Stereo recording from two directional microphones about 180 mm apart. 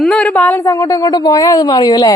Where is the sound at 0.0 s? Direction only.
5° left (ahead or behind).